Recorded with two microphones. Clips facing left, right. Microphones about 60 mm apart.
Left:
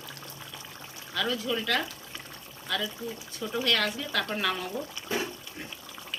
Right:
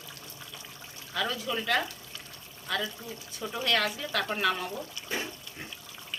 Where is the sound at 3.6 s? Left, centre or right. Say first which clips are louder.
Even; centre.